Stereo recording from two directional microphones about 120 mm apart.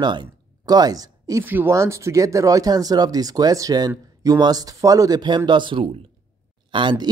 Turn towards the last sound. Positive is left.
turn(degrees=-40)  # may be behind; listen again after turning